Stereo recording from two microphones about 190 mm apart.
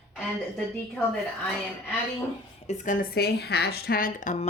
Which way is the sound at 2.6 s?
40° left (ahead or behind).